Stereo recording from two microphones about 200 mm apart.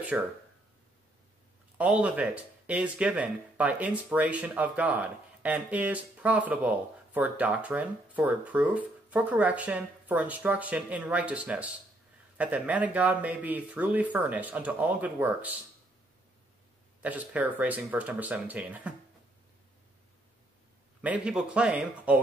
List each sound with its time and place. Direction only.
0.1 s speech: 5° right (ahead or behind)
1.8 s speech: 5° right (ahead or behind)
17.0 s speech: 5° right (ahead or behind)
21.0 s speech: 5° right (ahead or behind)